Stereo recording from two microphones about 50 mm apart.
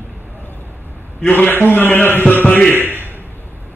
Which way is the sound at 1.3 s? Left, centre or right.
Left.